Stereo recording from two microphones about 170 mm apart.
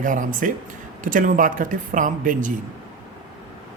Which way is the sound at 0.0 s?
50° right (ahead or behind).